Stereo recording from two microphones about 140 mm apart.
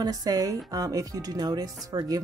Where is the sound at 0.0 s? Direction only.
25° right (ahead or behind).